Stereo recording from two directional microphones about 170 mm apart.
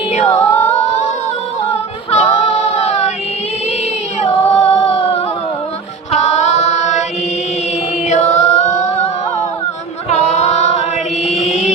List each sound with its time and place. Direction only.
0.1 s singing: 40° left (ahead or behind)
0.3 s music: 15° left (ahead or behind)
0.9 s humming: 40° left (ahead or behind)
1.7 s a capella: 40° left (ahead or behind)
4.2 s singing: 40° left (ahead or behind)
6.1 s a sound: 40° left (ahead or behind)
8.1 s music: 40° left (ahead or behind)
10.1 s music: 40° left (ahead or behind)
11.4 s a sound: 35° left (ahead or behind)